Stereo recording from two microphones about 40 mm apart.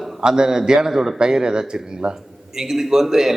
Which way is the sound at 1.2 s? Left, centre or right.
Centre.